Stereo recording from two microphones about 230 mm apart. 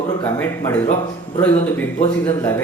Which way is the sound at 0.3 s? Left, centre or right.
Centre.